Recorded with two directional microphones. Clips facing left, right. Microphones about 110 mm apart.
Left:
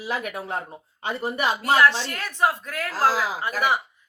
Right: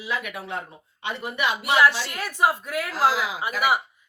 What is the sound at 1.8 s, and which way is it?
A woman's voice, 10° right (ahead or behind).